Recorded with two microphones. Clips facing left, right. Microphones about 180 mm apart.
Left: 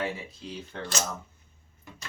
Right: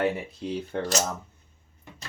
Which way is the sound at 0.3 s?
60° right (ahead or behind).